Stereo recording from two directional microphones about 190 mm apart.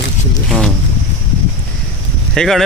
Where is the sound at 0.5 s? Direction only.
5° left (ahead or behind).